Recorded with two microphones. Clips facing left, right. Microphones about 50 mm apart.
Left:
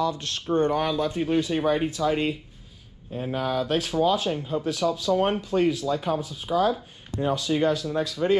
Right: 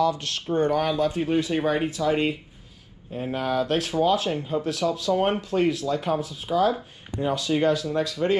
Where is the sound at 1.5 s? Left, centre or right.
Right.